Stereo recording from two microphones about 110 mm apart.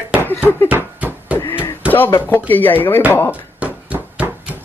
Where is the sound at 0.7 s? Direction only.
15° right (ahead or behind).